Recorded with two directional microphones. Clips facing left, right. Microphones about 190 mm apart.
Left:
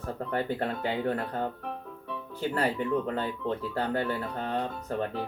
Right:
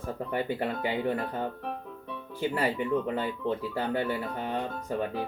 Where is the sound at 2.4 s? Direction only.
10° right (ahead or behind).